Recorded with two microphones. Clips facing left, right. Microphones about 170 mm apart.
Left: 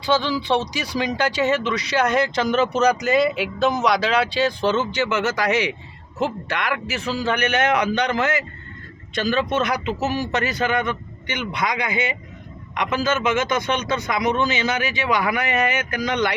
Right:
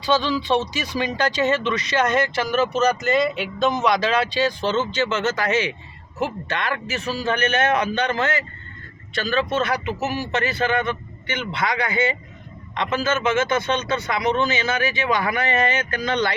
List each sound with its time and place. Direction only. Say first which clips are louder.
0.3 s speech: even; 10° left (ahead or behind)